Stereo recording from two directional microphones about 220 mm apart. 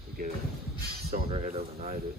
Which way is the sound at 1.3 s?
25° right (ahead or behind).